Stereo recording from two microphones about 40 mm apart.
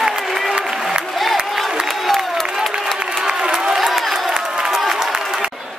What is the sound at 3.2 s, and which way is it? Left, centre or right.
Crowd, centre.